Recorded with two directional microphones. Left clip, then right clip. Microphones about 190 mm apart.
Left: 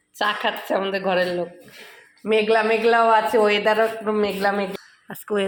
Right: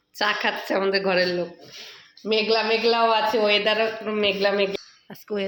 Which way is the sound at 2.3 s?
Centre (ahead or behind).